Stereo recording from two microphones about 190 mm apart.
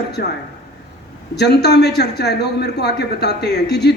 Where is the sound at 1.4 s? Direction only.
60° left (ahead or behind).